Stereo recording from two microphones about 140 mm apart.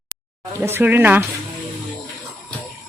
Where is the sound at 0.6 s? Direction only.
15° right (ahead or behind).